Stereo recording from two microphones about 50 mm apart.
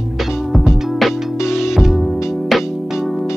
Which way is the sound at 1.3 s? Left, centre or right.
Left.